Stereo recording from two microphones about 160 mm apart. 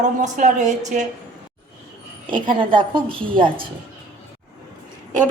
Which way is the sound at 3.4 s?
30° right (ahead or behind).